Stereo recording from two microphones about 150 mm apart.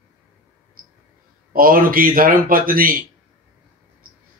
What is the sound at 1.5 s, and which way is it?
Speech, 70° right (ahead or behind).